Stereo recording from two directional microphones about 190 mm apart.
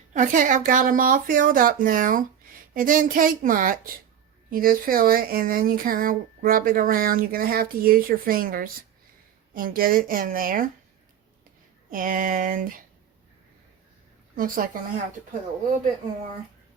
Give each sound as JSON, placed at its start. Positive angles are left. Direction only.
{"t": 0.1, "sound": "speech", "side_deg": -40}
{"t": 11.9, "sound": "speech", "side_deg": -45}
{"t": 14.3, "sound": "speech", "side_deg": -45}